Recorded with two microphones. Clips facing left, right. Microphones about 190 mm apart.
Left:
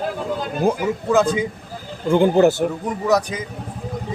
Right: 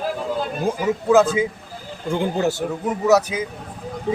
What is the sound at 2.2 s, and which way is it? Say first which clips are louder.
Speech: left 8 dB; 55° left (ahead or behind).